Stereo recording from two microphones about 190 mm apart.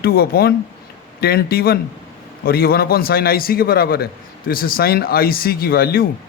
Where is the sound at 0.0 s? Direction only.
55° left (ahead or behind).